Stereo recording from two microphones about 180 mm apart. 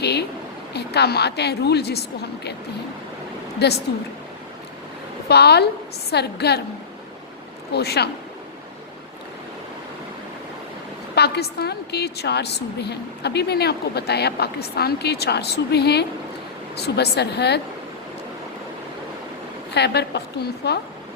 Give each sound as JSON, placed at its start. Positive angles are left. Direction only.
{"t": 0.0, "sound": "a sound", "side_deg": 65}
{"t": 0.7, "sound": "a woman's voice", "side_deg": 65}
{"t": 3.6, "sound": "a woman's voice", "side_deg": 65}
{"t": 5.3, "sound": "a woman's voice", "side_deg": 65}
{"t": 7.7, "sound": "a woman's voice", "side_deg": 65}
{"t": 11.1, "sound": "a woman's voice", "side_deg": 65}
{"t": 19.7, "sound": "a woman's voice", "side_deg": 65}